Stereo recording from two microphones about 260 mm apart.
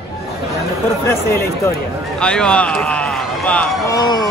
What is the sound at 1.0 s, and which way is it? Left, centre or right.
Speech, centre.